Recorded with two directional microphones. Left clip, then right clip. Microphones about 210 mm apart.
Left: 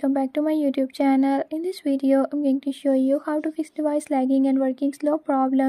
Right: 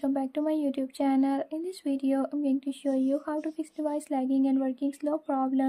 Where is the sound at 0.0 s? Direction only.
30° left (ahead or behind).